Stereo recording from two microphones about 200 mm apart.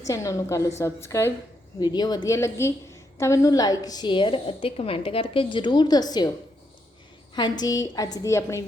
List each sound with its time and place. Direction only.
0.0 s a woman's voice: 15° left (ahead or behind)
7.3 s a woman's voice: 20° left (ahead or behind)